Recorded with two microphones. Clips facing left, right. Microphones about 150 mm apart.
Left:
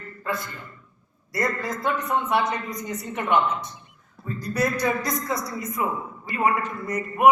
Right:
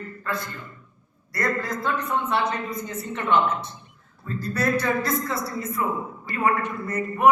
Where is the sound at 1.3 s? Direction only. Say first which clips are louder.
Even; 20° left (ahead or behind).